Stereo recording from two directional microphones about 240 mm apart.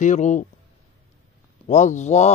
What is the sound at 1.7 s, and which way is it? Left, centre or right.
Mantra, left.